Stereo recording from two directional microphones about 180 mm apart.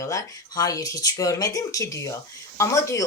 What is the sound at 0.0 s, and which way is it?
Speech, 20° left (ahead or behind).